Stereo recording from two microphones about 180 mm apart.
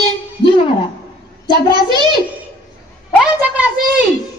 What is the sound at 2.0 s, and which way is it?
Speech, 25° right (ahead or behind).